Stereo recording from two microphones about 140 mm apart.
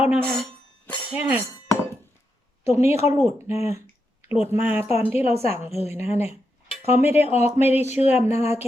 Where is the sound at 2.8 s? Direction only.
50° left (ahead or behind).